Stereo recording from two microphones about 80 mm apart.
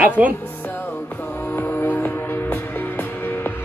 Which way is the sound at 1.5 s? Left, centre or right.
Left.